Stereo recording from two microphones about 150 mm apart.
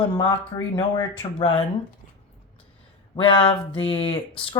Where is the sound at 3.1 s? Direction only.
35° left (ahead or behind).